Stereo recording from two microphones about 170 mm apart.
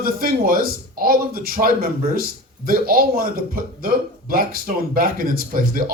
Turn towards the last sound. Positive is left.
turn(degrees=-60)  # may be behind; listen again after turning